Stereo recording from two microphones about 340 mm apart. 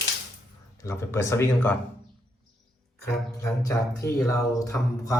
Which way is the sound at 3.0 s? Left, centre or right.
Centre.